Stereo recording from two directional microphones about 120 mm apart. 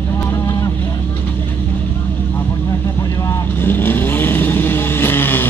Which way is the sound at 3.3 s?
15° left (ahead or behind).